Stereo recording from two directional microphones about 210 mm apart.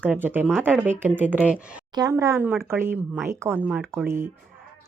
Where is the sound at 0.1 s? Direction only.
10° right (ahead or behind).